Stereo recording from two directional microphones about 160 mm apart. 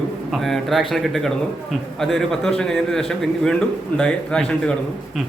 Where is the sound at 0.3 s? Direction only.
Centre (ahead or behind).